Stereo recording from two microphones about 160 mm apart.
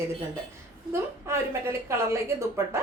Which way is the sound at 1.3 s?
15° right (ahead or behind).